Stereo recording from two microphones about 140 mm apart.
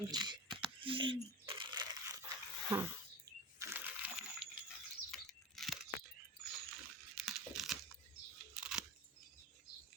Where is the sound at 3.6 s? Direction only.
15° right (ahead or behind).